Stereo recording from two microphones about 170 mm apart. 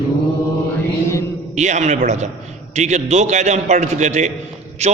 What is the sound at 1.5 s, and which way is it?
A man's voice, 45° right (ahead or behind).